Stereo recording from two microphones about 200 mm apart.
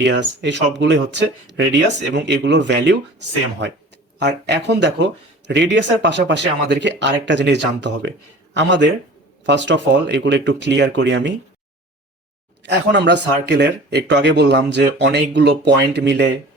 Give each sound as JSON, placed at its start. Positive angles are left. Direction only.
{"t": 0.0, "sound": "speech", "side_deg": -65}
{"t": 12.6, "sound": "speech", "side_deg": -60}